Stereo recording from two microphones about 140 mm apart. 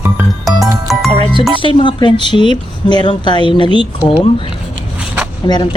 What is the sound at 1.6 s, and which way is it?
A woman's voice, 35° left (ahead or behind).